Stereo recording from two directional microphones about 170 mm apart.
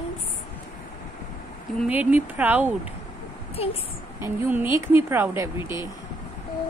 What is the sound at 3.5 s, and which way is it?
Speech, 35° left (ahead or behind).